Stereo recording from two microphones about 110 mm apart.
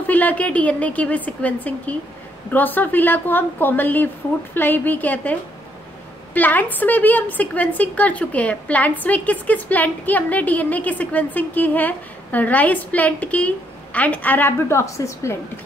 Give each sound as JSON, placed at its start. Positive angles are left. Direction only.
{"t": 0.0, "sound": "a woman's voice", "side_deg": 15}